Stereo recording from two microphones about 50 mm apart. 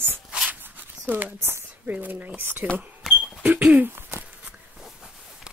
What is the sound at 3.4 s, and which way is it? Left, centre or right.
Speech, right.